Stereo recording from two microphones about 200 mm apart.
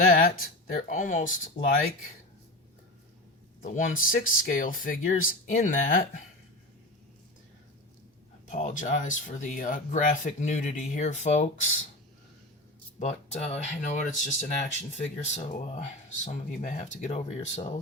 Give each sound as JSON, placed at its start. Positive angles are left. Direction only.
{"t": 0.1, "sound": "speech", "side_deg": 45}
{"t": 3.6, "sound": "speech", "side_deg": 40}
{"t": 8.4, "sound": "speech", "side_deg": 40}
{"t": 13.0, "sound": "speech", "side_deg": 35}